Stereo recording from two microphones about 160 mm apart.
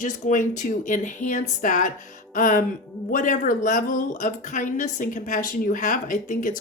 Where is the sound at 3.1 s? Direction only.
55° left (ahead or behind).